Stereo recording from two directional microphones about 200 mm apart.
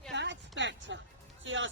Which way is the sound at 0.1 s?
60° right (ahead or behind).